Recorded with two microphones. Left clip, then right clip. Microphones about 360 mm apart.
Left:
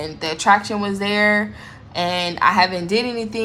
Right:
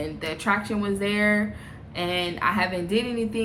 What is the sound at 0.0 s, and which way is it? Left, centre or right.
Speech, centre.